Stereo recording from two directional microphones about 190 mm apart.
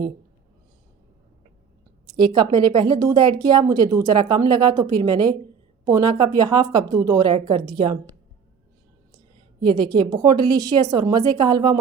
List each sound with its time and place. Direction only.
2.0 s speech: 25° right (ahead or behind)
9.6 s speech: 25° right (ahead or behind)